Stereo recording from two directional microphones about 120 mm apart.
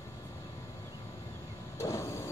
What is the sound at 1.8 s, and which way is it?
Vehicle, 25° left (ahead or behind).